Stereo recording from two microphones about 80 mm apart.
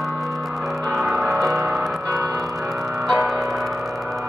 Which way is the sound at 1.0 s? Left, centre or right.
Centre.